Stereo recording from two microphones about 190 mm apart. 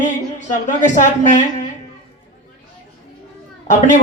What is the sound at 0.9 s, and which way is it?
Speech, 40° left (ahead or behind).